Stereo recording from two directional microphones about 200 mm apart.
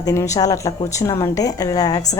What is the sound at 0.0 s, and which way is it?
A woman's voice, 15° left (ahead or behind).